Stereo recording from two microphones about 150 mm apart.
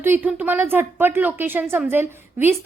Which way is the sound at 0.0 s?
15° right (ahead or behind).